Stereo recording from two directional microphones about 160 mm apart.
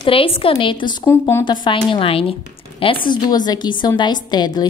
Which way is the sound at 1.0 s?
15° left (ahead or behind).